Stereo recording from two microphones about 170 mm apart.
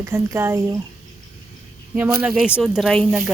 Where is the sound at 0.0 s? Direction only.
15° right (ahead or behind).